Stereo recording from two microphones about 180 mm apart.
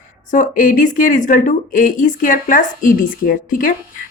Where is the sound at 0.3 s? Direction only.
45° left (ahead or behind).